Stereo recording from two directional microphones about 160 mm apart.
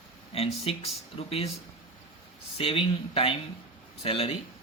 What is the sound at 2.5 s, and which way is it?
A man's voice, 35° left (ahead or behind).